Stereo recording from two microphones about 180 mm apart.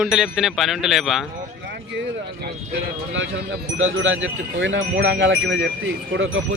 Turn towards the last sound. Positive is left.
turn(degrees=-90)